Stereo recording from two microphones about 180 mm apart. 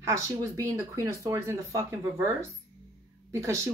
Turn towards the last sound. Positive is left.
turn(degrees=-15)  # may be behind; listen again after turning